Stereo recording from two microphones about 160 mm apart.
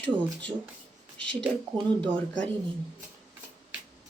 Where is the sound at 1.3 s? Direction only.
5° left (ahead or behind).